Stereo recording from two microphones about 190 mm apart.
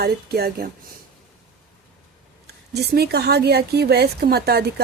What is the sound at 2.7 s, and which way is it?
A woman's voice, 60° right (ahead or behind).